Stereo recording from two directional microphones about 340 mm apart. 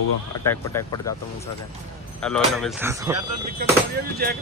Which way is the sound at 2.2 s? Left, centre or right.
Centre.